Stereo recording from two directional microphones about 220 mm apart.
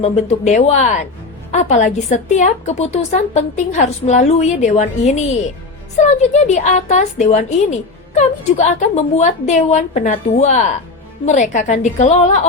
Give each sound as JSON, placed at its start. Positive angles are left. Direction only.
{"t": 0.0, "sound": "a woman's voice", "side_deg": 30}